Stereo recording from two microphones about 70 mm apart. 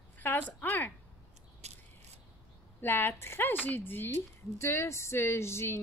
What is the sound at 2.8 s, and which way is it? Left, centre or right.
A woman's voice, left.